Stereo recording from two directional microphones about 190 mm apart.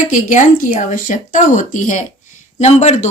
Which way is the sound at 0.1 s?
40° left (ahead or behind).